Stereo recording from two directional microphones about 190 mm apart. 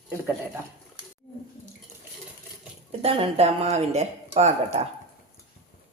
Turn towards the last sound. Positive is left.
turn(degrees=-35)  # may be behind; listen again after turning